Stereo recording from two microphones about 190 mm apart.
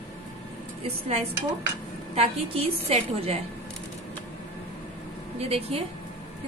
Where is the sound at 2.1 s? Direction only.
30° right (ahead or behind).